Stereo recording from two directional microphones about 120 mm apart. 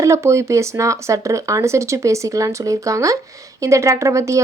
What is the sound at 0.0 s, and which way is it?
Speech, 25° right (ahead or behind).